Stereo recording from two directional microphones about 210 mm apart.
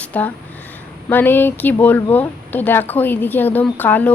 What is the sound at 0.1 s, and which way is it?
Speech, 5° left (ahead or behind).